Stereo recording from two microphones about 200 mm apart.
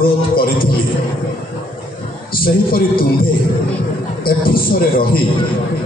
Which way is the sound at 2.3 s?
45° left (ahead or behind).